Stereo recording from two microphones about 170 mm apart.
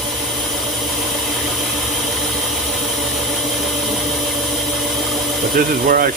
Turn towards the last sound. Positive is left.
turn(degrees=-55)  # may be behind; listen again after turning